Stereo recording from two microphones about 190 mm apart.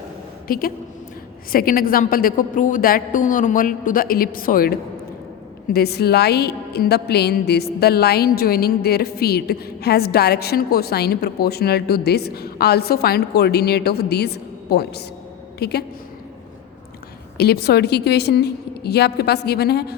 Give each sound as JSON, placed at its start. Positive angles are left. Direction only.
{"t": 0.4, "sound": "a woman's voice", "side_deg": 50}
{"t": 5.7, "sound": "a woman's voice", "side_deg": 55}
{"t": 17.3, "sound": "a woman's voice", "side_deg": 60}